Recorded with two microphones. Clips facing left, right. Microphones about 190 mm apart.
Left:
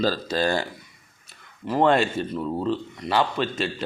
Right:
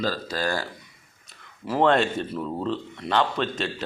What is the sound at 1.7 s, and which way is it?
Speech, centre (ahead or behind).